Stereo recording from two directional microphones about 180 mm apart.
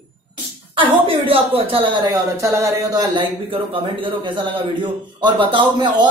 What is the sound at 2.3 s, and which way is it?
A man's voice, 15° right (ahead or behind).